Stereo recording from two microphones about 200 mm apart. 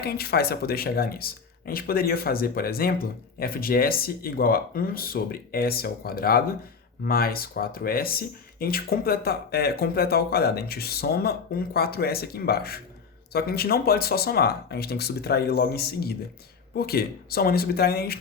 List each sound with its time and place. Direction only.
0.0 s speech: 50° left (ahead or behind)